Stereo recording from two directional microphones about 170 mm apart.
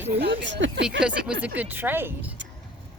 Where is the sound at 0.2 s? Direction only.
90° right.